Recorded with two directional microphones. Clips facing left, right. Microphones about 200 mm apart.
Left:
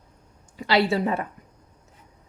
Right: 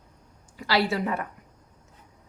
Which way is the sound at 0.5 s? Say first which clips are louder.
Left 3 dB; 25° left (ahead or behind).